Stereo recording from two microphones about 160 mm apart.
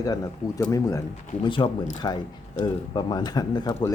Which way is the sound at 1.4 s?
30° left (ahead or behind).